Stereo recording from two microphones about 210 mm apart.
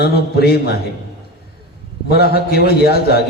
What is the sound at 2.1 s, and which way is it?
A man's voice, 50° left (ahead or behind).